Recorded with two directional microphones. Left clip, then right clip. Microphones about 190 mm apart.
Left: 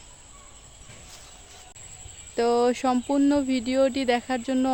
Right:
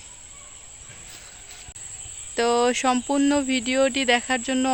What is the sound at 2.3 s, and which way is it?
Speech, 5° left (ahead or behind).